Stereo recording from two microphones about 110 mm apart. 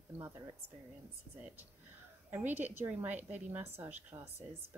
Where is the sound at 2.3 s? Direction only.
20° right (ahead or behind).